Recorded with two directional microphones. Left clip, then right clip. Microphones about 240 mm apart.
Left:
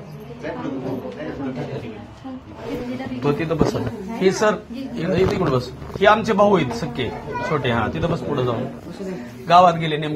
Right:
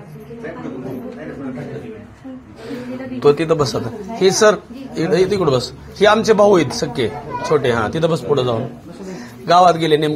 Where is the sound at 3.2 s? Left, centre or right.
Right.